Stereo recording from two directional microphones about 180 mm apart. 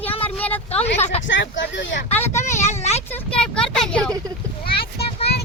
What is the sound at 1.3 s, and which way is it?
Speech, 90° left.